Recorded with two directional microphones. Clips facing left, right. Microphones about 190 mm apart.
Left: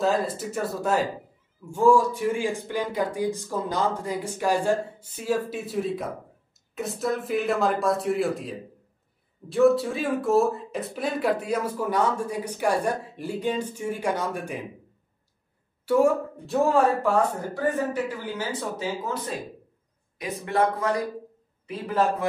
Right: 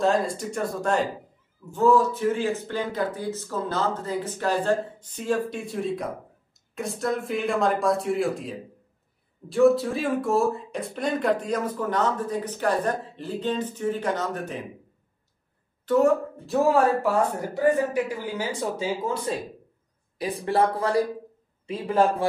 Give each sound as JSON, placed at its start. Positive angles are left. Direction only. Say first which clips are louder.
{"t": 0.0, "sound": "speech", "louder": "right 1 dB", "side_deg": 0}
{"t": 15.8, "sound": "speech", "louder": "right 1 dB", "side_deg": 10}
{"t": 17.6, "sound": "speech", "louder": "right 4 dB", "side_deg": -10}
{"t": 20.2, "sound": "speech", "louder": "right 2 dB", "side_deg": -30}